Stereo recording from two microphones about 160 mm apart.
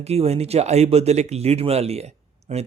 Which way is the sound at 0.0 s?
40° right (ahead or behind).